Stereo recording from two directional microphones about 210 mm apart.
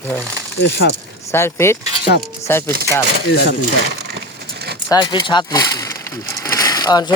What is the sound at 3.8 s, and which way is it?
Crushing, 50° right (ahead or behind).